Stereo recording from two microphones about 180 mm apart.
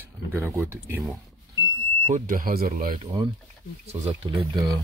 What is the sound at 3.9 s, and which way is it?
Speech, 30° right (ahead or behind).